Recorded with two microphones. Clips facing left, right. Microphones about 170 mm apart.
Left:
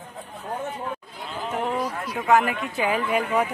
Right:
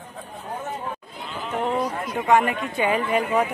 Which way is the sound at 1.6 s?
25° right (ahead or behind).